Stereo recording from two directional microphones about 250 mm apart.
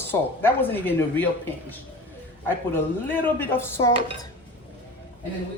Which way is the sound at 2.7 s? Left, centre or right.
Centre.